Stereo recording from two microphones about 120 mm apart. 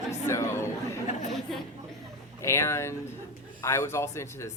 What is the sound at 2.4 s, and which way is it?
Speech, 20° left (ahead or behind).